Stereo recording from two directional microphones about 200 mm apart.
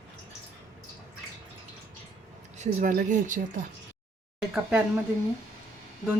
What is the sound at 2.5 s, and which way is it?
Speech, 40° right (ahead or behind).